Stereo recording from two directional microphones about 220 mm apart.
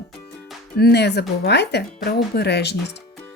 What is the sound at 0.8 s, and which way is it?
Speech, 50° left (ahead or behind).